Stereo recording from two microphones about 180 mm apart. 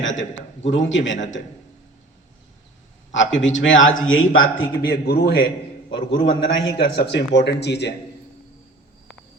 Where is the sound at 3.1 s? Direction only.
90° left.